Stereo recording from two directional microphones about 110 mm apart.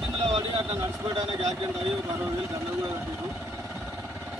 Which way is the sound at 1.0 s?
45° right (ahead or behind).